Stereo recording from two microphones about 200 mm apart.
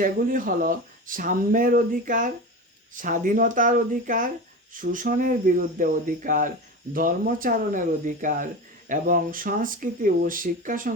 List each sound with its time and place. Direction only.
0.0 s speech: 45° right (ahead or behind)